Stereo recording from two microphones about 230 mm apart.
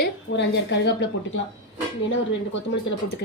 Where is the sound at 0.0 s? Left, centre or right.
Left.